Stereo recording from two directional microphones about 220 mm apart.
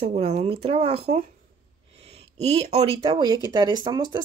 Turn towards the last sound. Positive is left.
turn(degrees=-20)  # may be behind; listen again after turning